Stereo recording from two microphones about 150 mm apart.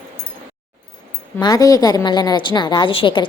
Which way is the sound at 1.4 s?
25° left (ahead or behind).